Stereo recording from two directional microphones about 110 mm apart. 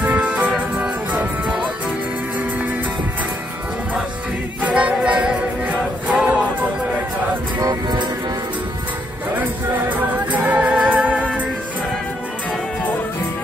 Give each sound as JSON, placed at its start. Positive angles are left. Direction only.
{"t": 0.0, "sound": "music", "side_deg": -15}
{"t": 4.6, "sound": "music", "side_deg": -10}
{"t": 7.6, "sound": "music", "side_deg": -40}
{"t": 9.4, "sound": "music", "side_deg": -15}